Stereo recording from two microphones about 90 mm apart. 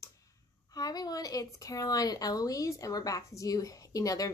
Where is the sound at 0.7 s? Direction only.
45° left (ahead or behind).